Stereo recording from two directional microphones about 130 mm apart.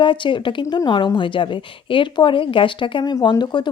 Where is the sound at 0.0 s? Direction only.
40° left (ahead or behind).